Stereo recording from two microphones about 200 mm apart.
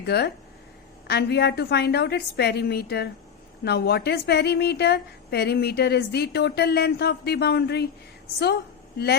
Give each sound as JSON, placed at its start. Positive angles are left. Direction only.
{"t": 0.0, "sound": "a woman's voice", "side_deg": 55}